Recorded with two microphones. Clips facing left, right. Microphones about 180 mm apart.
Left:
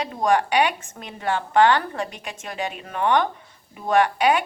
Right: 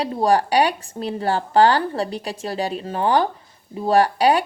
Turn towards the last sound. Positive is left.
turn(degrees=-35)  # may be behind; listen again after turning